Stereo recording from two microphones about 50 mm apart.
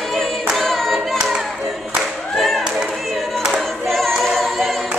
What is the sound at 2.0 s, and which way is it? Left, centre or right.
Singing, centre.